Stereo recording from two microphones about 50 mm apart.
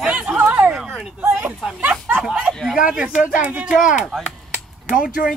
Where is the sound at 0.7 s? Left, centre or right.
Centre.